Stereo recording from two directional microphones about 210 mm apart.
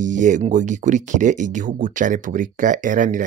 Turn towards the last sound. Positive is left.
turn(degrees=-40)  # may be behind; listen again after turning